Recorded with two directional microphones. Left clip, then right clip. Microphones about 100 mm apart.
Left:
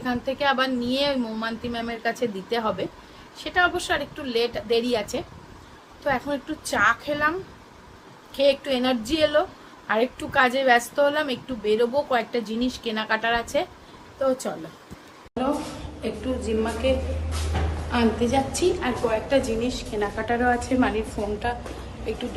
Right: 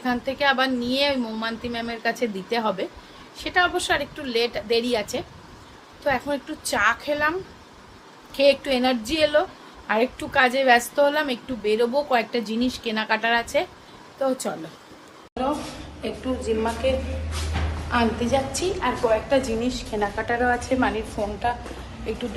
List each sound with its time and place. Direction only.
0.0 s a woman's voice: 20° right (ahead or behind)
8.4 s a woman's voice: 20° right (ahead or behind)
16.0 s a woman's voice: 5° left (ahead or behind)
17.9 s a woman's voice: centre (ahead or behind)